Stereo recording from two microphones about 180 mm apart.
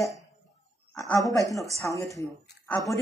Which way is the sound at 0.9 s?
15° left (ahead or behind).